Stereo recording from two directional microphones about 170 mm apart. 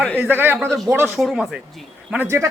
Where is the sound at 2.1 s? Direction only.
15° right (ahead or behind).